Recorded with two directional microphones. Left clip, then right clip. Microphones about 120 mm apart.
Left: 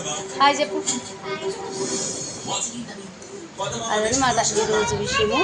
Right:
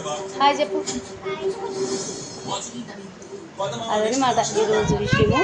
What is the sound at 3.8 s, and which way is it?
Speech, 5° right (ahead or behind).